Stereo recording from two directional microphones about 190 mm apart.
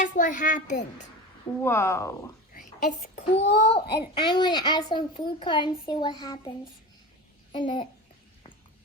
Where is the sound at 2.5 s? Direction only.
45° left (ahead or behind).